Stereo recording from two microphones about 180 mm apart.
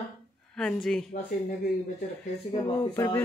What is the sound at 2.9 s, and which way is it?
Speech, 15° left (ahead or behind).